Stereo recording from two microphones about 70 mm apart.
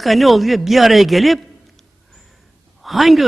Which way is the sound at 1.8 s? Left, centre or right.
Centre.